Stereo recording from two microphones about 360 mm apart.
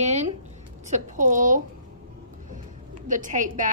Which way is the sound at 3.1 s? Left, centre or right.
Right.